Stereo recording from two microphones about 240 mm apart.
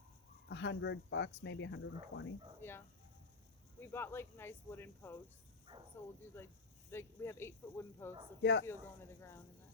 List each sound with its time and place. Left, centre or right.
0.4 s speech: left
2.6 s speech: centre
5.7 s speech: centre
6.3 s speech: centre
8.4 s speech: left
8.6 s speech: centre